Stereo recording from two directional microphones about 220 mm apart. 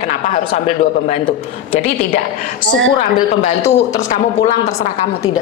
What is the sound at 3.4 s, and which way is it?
A woman's voice, 35° left (ahead or behind).